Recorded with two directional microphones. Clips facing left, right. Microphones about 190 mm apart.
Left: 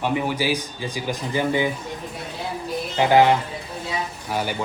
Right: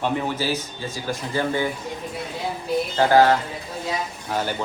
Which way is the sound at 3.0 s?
15° left (ahead or behind).